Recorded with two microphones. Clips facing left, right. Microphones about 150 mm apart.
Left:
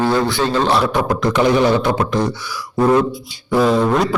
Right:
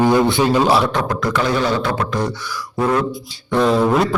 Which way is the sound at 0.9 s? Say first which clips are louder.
Left 3 dB; 15° left (ahead or behind).